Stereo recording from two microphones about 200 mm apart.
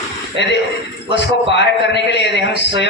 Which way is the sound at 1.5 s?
60° left (ahead or behind).